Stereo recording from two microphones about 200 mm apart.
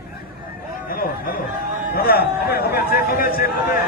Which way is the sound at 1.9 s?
50° left (ahead or behind).